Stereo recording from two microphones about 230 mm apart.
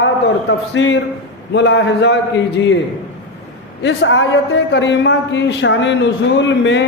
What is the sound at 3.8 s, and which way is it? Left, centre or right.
A man's voice, left.